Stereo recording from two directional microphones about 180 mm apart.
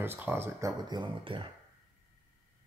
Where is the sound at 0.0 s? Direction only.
10° right (ahead or behind); by 1.5 s 30° right (ahead or behind).